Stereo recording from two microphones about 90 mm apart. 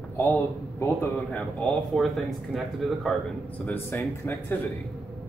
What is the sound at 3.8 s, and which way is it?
Speech, 25° left (ahead or behind).